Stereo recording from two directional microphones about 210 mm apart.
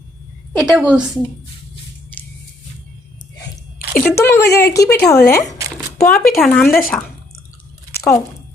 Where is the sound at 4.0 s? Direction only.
15° left (ahead or behind).